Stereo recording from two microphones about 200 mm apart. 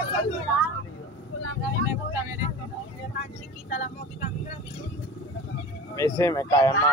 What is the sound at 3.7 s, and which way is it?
Speech, 35° left (ahead or behind).